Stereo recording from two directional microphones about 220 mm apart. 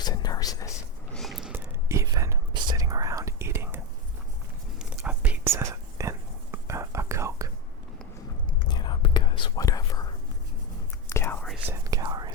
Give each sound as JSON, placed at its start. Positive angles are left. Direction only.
{"t": 0.0, "sound": "a sound", "side_deg": 20}
{"t": 1.1, "sound": "whispering", "side_deg": 0}
{"t": 4.8, "sound": "whispering", "side_deg": -5}
{"t": 8.4, "sound": "whispering", "side_deg": 20}
{"t": 11.1, "sound": "whispering", "side_deg": 10}
{"t": 11.7, "sound": "whispering", "side_deg": -15}